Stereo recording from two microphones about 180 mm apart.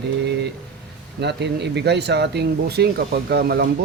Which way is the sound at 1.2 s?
70° right (ahead or behind).